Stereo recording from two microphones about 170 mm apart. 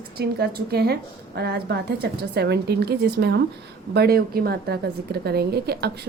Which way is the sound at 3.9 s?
65° right (ahead or behind).